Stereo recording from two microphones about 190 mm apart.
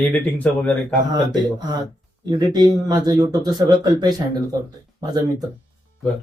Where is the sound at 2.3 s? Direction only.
20° right (ahead or behind).